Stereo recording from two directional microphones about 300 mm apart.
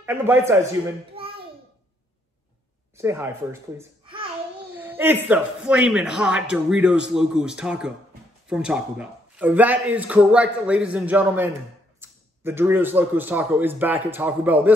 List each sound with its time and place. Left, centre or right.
0.0 s speech: centre
1.1 s a sound: centre
3.0 s a man's voice: centre